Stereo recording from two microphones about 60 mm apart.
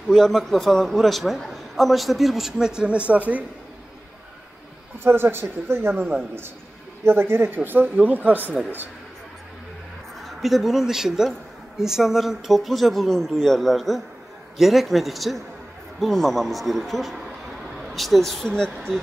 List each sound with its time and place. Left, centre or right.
0.1 s speech: centre
2.5 s a woman's voice: centre
5.0 s speech: right
10.2 s speech: centre